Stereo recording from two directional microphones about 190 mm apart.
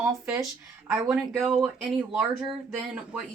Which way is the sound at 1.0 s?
5° right (ahead or behind).